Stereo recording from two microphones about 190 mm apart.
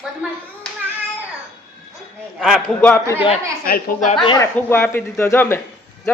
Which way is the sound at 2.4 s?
5° left (ahead or behind).